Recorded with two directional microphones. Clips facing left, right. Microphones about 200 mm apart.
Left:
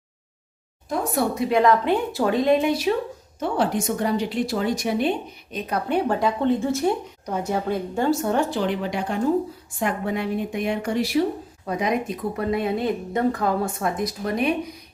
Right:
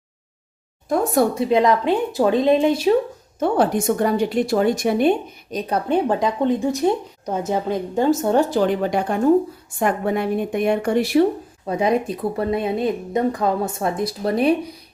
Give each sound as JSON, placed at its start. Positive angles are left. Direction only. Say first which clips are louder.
{"t": 1.4, "sound": "speech", "louder": "right 2 dB", "side_deg": -20}
{"t": 3.4, "sound": "a woman's voice", "louder": "right 5 dB", "side_deg": -50}
{"t": 6.1, "sound": "speech", "louder": "right 2 dB", "side_deg": -20}
{"t": 8.4, "sound": "a woman's voice", "louder": "right 5 dB", "side_deg": -45}
{"t": 11.6, "sound": "speech", "louder": "right 4 dB", "side_deg": -30}